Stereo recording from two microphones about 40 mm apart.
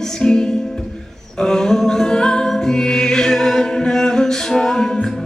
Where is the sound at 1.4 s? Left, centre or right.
Centre.